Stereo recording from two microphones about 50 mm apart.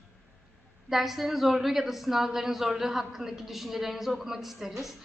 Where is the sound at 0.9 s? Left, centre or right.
Centre.